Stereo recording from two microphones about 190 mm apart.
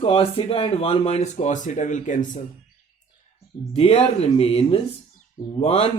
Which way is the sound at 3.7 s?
30° left (ahead or behind).